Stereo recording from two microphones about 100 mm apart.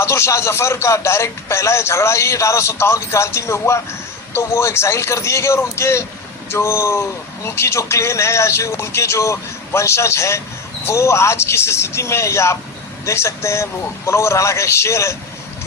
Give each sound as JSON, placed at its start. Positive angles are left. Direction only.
{"t": 0.0, "sound": "a man's voice", "side_deg": 30}